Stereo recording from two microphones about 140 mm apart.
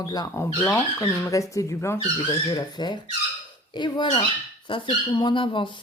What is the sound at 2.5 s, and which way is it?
Speech, 30° left (ahead or behind).